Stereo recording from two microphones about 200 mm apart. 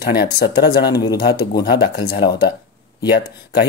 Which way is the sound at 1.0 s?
20° left (ahead or behind).